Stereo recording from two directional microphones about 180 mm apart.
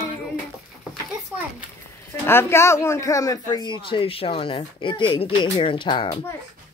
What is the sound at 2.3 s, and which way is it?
Speech, 15° left (ahead or behind).